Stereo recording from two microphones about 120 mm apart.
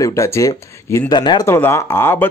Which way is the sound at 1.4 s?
20° left (ahead or behind).